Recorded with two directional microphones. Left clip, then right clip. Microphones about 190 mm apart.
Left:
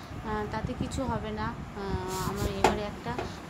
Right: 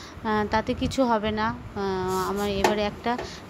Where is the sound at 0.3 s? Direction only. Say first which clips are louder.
Right 9 dB; 40° right (ahead or behind).